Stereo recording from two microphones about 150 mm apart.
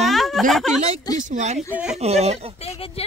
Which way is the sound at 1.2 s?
55° right (ahead or behind).